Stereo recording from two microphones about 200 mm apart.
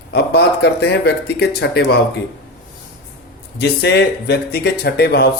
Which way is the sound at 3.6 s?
60° left (ahead or behind).